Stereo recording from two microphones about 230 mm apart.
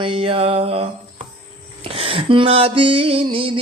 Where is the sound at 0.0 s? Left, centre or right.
Right.